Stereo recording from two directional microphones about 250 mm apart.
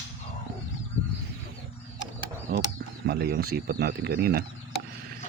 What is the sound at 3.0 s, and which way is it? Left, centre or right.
Speech, right.